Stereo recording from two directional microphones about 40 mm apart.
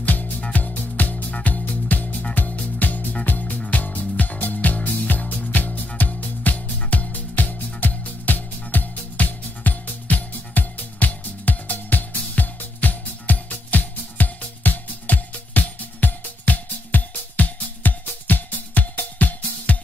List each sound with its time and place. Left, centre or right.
0.0 s music: left